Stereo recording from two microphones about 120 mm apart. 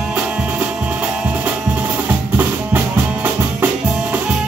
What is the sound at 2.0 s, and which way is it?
Music, 15° right (ahead or behind).